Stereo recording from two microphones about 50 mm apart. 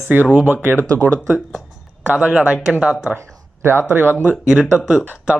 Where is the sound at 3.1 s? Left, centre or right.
Right.